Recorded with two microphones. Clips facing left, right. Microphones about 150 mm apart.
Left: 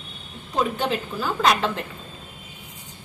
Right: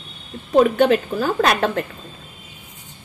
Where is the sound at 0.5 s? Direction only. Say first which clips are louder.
Right 10 dB; 60° right (ahead or behind).